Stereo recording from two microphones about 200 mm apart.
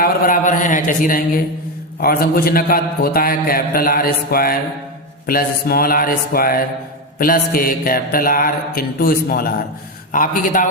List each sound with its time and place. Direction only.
0.0 s a man's voice: 40° left (ahead or behind)